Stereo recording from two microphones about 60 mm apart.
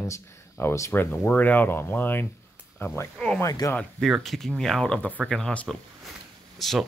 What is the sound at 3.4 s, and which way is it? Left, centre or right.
Speech, left.